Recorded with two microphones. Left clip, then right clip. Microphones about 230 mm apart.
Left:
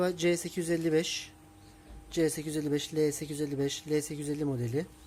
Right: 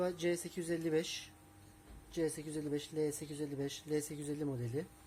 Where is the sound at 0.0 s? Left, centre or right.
Centre.